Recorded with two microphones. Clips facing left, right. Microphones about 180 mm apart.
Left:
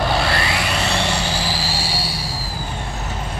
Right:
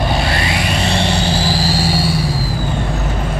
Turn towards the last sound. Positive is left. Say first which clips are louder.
# right 9 dB
turn(degrees=-45)  # may be behind; listen again after turning